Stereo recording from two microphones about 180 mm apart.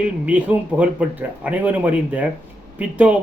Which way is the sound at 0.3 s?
10° right (ahead or behind).